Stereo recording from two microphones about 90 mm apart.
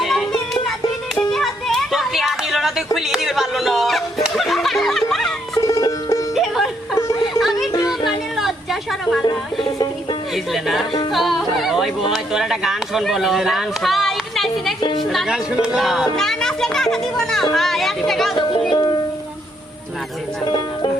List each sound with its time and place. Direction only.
0.0 s a sound: centre (ahead or behind)
1.1 s music: 5° left (ahead or behind)
5.5 s music: 40° left (ahead or behind)
6.3 s music: centre (ahead or behind)
10.3 s speech: centre (ahead or behind)
11.1 s yodeling: centre (ahead or behind)
12.1 s speech: 5° right (ahead or behind)
14.8 s speech: 60° left (ahead or behind)
15.1 s speech: centre (ahead or behind)
18.7 s music: 55° left (ahead or behind)